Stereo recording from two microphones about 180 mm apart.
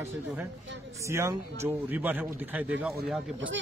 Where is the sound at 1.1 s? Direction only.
15° right (ahead or behind).